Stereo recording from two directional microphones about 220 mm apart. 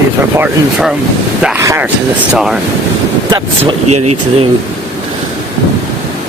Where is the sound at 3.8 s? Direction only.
90° right.